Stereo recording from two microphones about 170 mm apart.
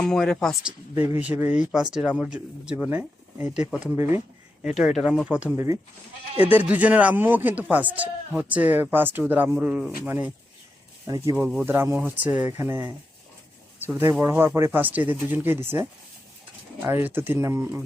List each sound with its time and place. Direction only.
0.0 s speech: 5° left (ahead or behind)
1.1 s speech: 10° right (ahead or behind)
5.5 s speech: 20° right (ahead or behind)